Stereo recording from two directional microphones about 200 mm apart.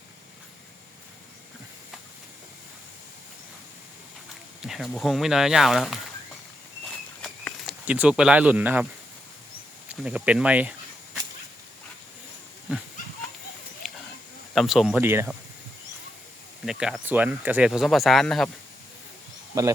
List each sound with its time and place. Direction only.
4.6 s speech: centre (ahead or behind)
7.2 s a sound: centre (ahead or behind)
9.9 s speech: 5° right (ahead or behind)
13.8 s a sound: centre (ahead or behind)
14.5 s speech: centre (ahead or behind)
16.6 s speech: 5° right (ahead or behind)
19.5 s speech: 15° right (ahead or behind)